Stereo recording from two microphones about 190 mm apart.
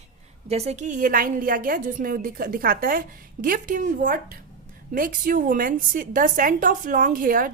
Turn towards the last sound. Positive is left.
turn(degrees=-45)  # may be behind; listen again after turning